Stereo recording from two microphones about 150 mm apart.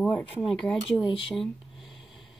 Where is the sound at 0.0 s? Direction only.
10° left (ahead or behind).